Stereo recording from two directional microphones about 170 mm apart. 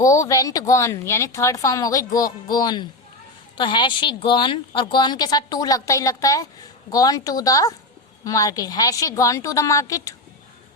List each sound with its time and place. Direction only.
0.0 s a woman's voice: 20° left (ahead or behind)